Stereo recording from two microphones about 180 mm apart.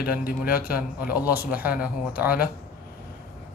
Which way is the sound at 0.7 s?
10° right (ahead or behind).